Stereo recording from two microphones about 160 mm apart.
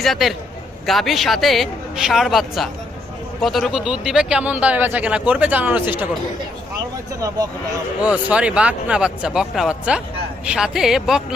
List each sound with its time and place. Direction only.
0.0 s speech: centre (ahead or behind)
7.2 s speech: 20° right (ahead or behind)
8.0 s speech: 10° right (ahead or behind)